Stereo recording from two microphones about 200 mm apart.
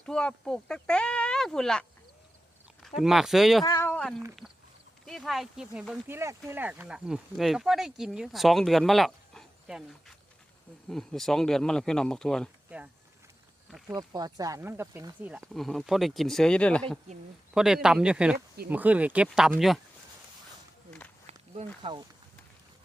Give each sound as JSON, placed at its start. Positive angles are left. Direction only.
{"t": 0.0, "sound": "speech", "side_deg": 5}
{"t": 3.0, "sound": "speech", "side_deg": 0}
{"t": 3.6, "sound": "speech", "side_deg": 15}
{"t": 10.8, "sound": "speech", "side_deg": 0}
{"t": 13.7, "sound": "snake", "side_deg": 0}
{"t": 13.9, "sound": "a man's voice", "side_deg": -20}
{"t": 21.8, "sound": "speech", "side_deg": -25}